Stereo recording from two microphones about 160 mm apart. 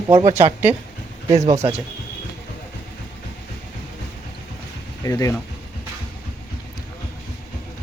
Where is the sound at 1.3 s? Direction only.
45° right (ahead or behind).